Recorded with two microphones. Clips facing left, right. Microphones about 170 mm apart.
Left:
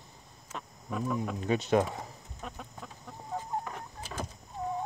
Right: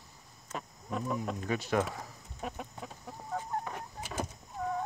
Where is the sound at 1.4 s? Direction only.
20° left (ahead or behind).